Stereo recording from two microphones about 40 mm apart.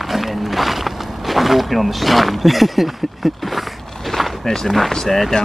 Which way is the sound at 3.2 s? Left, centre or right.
Centre.